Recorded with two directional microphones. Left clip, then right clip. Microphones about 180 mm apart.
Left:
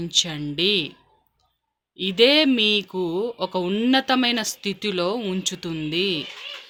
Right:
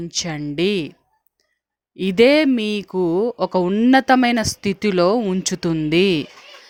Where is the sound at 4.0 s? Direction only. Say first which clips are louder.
Right 5 dB; 50° right (ahead or behind).